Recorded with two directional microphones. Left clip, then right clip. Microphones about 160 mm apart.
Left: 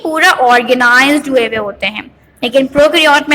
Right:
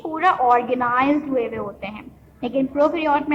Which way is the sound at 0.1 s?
40° left (ahead or behind).